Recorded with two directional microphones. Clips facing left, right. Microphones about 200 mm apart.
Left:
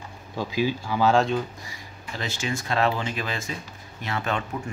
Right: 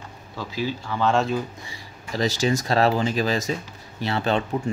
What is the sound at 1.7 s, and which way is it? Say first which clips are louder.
Speech: right 5 dB; 40° right (ahead or behind).